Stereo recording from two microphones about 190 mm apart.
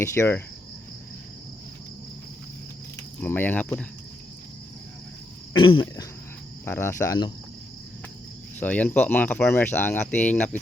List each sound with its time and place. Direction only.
0.0 s speech: 15° left (ahead or behind)
3.2 s speech: 10° left (ahead or behind)
5.5 s cricket: 25° left (ahead or behind)
6.7 s speech: 15° left (ahead or behind)
8.5 s speech: 10° left (ahead or behind)